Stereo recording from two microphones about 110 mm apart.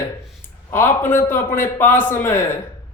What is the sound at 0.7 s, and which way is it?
A man's voice, 20° left (ahead or behind).